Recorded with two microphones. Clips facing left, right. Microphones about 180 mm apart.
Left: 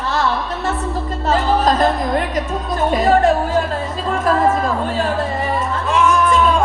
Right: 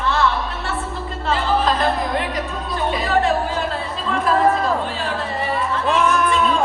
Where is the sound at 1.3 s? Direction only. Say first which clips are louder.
Left 3 dB; 45° left (ahead or behind).